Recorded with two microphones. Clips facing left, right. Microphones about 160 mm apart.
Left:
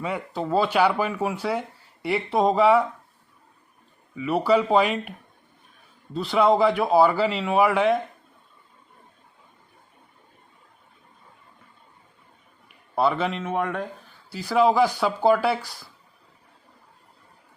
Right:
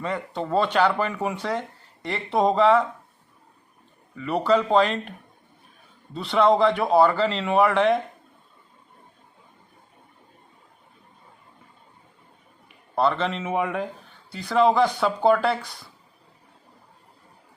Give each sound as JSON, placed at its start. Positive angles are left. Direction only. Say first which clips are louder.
{"t": 0.0, "sound": "speech", "louder": "even", "side_deg": 5}
{"t": 4.1, "sound": "speech", "louder": "left 1 dB", "side_deg": 5}
{"t": 6.1, "sound": "speech", "louder": "even", "side_deg": 0}
{"t": 13.0, "sound": "speech", "louder": "even", "side_deg": 5}